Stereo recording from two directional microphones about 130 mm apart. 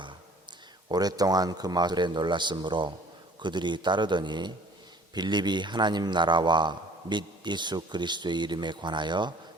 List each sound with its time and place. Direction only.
0.9 s a man's voice: 30° right (ahead or behind)